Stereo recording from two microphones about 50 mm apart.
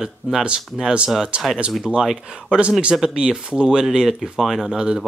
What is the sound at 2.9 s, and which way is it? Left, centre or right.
Speech, centre.